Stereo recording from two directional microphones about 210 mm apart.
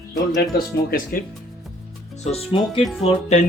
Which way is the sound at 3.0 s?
35° left (ahead or behind).